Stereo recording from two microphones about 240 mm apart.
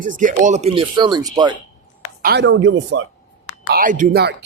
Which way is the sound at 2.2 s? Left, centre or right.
Right.